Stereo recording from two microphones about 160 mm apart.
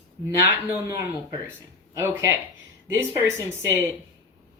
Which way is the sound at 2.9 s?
20° right (ahead or behind).